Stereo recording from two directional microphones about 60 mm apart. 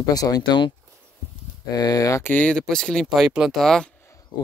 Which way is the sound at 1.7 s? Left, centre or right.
Left.